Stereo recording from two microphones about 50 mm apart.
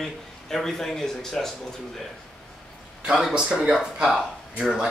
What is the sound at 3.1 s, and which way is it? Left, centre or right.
Speech, centre.